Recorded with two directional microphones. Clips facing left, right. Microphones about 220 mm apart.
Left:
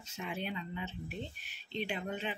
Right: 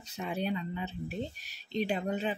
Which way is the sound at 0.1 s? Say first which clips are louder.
Right 6 dB; 35° right (ahead or behind).